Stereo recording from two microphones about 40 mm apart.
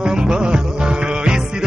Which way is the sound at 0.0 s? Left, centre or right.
Centre.